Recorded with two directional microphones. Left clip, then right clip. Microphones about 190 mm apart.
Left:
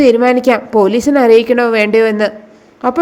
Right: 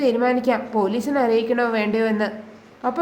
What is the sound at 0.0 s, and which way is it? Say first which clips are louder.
A woman's voice: left 10 dB; 40° left (ahead or behind).